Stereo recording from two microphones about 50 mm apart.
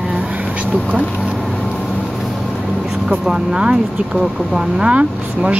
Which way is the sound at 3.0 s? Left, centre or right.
Centre.